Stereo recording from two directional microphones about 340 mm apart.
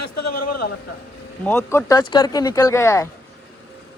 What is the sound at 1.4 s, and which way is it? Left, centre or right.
Speech, centre.